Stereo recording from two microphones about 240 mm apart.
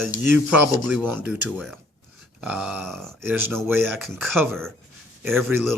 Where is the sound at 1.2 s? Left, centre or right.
Centre.